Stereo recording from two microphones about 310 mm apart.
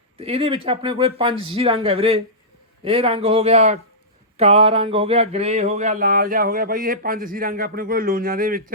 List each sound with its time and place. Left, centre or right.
0.2 s speech: centre